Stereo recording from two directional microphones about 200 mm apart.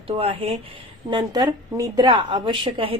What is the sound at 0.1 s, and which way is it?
A woman's voice, 30° right (ahead or behind).